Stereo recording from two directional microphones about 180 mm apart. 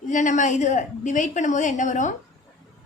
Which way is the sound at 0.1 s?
45° left (ahead or behind).